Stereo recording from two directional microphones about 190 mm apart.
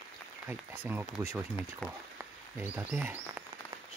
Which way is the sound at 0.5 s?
10° right (ahead or behind).